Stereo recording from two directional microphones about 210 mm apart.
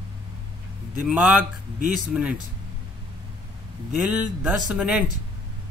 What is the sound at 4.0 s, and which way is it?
Speech, 5° right (ahead or behind).